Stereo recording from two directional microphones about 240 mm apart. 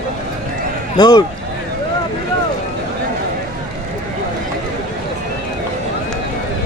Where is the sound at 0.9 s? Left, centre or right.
Centre.